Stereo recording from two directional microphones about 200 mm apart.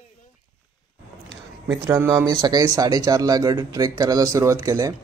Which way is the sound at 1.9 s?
15° right (ahead or behind).